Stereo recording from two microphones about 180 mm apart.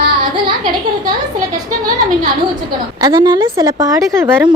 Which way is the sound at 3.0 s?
25° right (ahead or behind).